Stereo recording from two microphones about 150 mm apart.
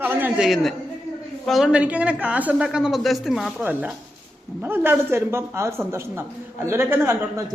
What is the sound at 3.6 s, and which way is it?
Speech, 10° right (ahead or behind).